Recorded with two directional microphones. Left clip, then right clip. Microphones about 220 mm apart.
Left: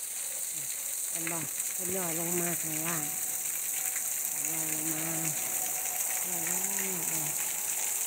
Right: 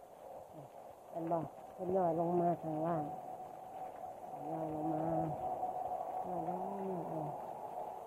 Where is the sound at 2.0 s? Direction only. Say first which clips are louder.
Right 3 dB; 20° left (ahead or behind).